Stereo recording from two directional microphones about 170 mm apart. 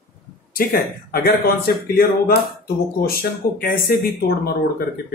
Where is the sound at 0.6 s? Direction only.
60° left (ahead or behind).